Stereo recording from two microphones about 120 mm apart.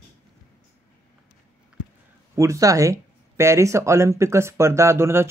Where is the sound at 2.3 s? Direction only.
25° right (ahead or behind).